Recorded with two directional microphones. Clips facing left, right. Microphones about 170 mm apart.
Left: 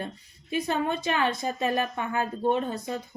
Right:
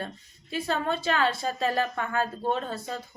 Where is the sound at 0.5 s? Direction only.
15° left (ahead or behind).